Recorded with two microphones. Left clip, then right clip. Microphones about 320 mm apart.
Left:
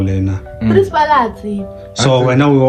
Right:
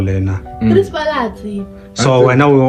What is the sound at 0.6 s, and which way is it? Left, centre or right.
Speech, left.